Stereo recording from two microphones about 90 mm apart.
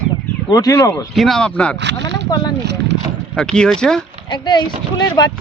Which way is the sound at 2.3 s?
45° left (ahead or behind).